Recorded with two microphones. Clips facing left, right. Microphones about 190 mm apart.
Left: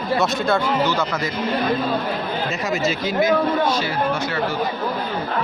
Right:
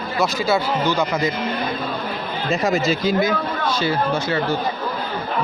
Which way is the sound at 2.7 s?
35° right (ahead or behind).